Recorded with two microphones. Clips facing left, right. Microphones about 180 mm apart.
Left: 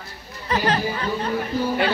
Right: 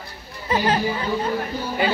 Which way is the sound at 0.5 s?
25° right (ahead or behind).